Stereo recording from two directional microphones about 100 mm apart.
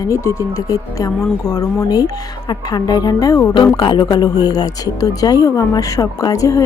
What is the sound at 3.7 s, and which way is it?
Speech, 50° left (ahead or behind).